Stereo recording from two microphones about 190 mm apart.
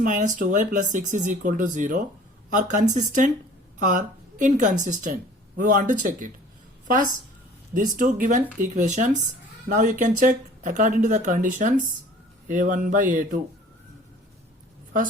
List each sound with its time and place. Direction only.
0.0 s a woman's voice: 40° right (ahead or behind)